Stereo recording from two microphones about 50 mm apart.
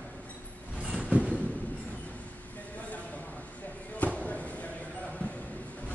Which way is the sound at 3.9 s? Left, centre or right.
Left.